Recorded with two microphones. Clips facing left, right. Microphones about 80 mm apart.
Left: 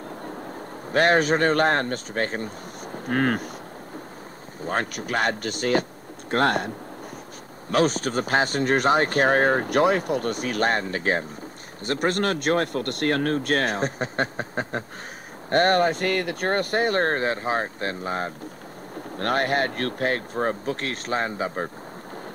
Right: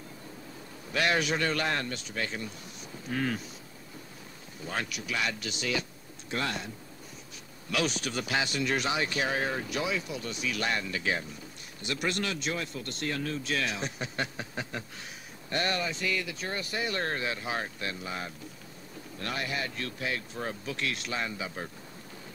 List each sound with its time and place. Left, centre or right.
0.9 s speech: left
4.6 s speech: left
7.7 s speech: left